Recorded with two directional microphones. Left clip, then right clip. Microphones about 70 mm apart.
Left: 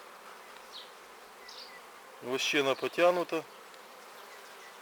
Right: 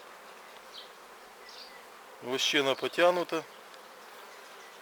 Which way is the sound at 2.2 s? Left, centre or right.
Right.